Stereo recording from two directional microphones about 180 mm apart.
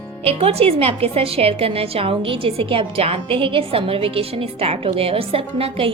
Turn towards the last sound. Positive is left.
turn(degrees=-30)  # may be behind; listen again after turning